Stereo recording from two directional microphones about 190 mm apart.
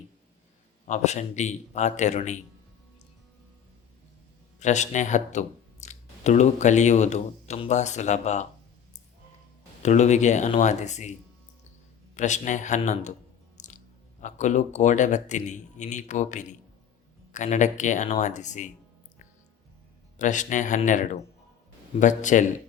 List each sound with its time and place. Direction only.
0.9 s speech: 35° left (ahead or behind)
4.6 s speech: 40° left (ahead or behind)
9.8 s speech: 35° left (ahead or behind)
12.1 s speech: 40° left (ahead or behind)
20.1 s speech: 40° left (ahead or behind)